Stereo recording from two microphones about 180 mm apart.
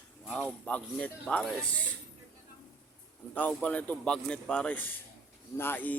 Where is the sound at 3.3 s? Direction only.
10° left (ahead or behind).